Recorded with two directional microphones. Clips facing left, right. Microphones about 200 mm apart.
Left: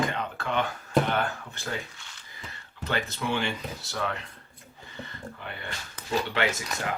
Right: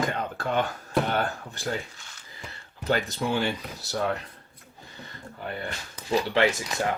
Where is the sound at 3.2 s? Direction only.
40° right (ahead or behind).